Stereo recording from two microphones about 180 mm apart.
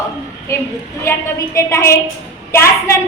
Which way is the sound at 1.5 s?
15° left (ahead or behind).